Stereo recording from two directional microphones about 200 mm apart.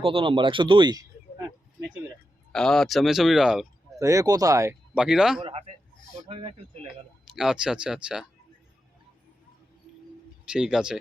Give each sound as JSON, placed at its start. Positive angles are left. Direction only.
{"t": 0.0, "sound": "speech", "side_deg": -25}
{"t": 2.5, "sound": "speech", "side_deg": 5}
{"t": 3.9, "sound": "speech", "side_deg": -15}
{"t": 4.9, "sound": "speech", "side_deg": -5}
{"t": 5.4, "sound": "a sound", "side_deg": -30}
{"t": 6.2, "sound": "speech", "side_deg": -30}
{"t": 7.3, "sound": "speech", "side_deg": -5}
{"t": 10.5, "sound": "speech", "side_deg": -5}